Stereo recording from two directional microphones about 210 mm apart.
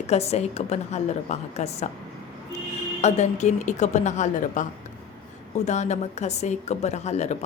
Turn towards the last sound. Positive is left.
turn(degrees=30)  # may be behind; listen again after turning